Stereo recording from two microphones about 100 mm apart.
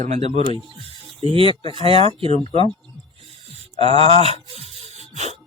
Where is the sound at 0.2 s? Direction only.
90° right.